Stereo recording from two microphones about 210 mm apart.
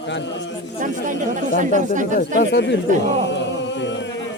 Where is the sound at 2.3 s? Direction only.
55° left (ahead or behind).